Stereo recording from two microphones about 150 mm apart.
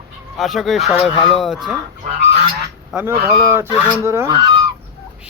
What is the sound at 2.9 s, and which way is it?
Speech, 5° right (ahead or behind).